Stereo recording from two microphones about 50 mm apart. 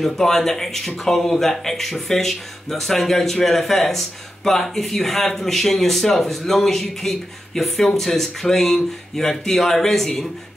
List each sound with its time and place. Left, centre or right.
0.0 s speech: centre